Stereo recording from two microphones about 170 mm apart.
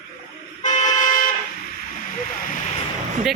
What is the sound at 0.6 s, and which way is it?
Vehicle, 45° left (ahead or behind).